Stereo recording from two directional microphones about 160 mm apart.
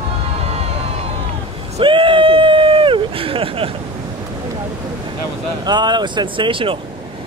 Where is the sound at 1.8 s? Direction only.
30° right (ahead or behind).